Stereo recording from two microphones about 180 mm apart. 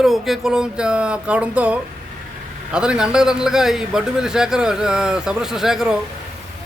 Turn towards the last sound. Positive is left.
turn(degrees=-5)  # may be behind; listen again after turning